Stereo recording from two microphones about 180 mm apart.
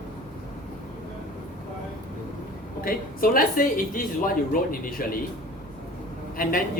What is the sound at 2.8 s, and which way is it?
Speech, 55° left (ahead or behind).